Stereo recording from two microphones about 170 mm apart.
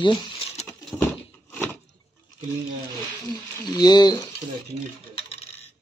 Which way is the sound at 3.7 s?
25° left (ahead or behind).